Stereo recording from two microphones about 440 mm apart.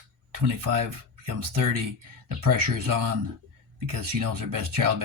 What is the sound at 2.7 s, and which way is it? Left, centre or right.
Speech, right.